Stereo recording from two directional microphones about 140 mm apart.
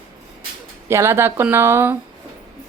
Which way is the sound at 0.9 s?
20° right (ahead or behind).